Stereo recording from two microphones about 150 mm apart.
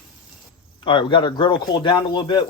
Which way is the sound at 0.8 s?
35° left (ahead or behind).